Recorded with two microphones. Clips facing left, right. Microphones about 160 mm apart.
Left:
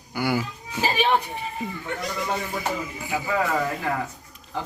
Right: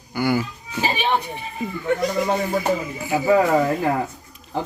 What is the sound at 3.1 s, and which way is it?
Speech, 40° right (ahead or behind).